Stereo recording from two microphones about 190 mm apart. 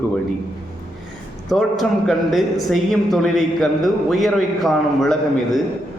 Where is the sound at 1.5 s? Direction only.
Centre (ahead or behind).